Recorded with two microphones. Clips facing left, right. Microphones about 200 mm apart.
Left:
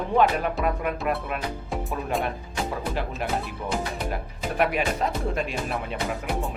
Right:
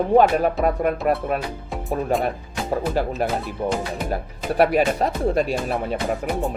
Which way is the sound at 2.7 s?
40° right (ahead or behind).